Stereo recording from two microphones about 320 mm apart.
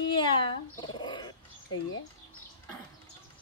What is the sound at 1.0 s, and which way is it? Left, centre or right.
Bird, centre.